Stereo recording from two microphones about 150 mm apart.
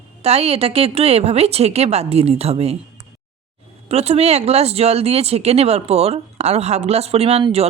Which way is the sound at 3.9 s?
45° right (ahead or behind).